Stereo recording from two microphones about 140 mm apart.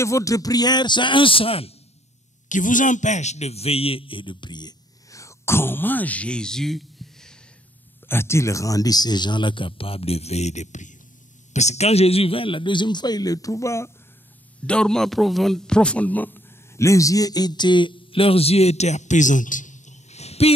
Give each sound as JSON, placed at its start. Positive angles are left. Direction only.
{"t": 0.0, "sound": "speech", "side_deg": 20}
{"t": 2.4, "sound": "a man's voice", "side_deg": 65}
{"t": 8.1, "sound": "speech", "side_deg": 20}
{"t": 14.7, "sound": "speech", "side_deg": 5}